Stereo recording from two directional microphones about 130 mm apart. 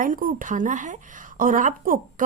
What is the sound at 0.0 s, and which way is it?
Speech, 90° right.